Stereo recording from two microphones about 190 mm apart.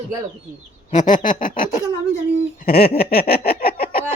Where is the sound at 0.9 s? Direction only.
40° left (ahead or behind).